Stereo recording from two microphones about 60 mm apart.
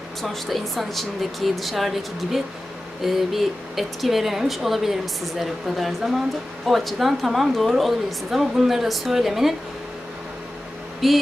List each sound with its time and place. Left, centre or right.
0.2 s speech: centre
11.0 s speech: centre